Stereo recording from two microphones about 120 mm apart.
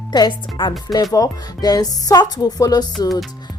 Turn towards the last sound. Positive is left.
turn(degrees=35)  # may be behind; listen again after turning